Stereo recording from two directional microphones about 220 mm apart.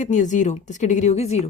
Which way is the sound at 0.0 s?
35° left (ahead or behind).